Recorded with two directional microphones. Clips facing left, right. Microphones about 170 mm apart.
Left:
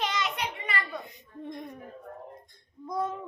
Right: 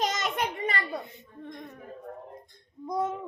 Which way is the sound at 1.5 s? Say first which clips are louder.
Left 3 dB; 15° left (ahead or behind).